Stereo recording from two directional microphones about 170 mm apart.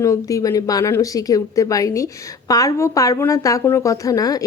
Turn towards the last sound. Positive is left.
turn(degrees=20)  # may be behind; listen again after turning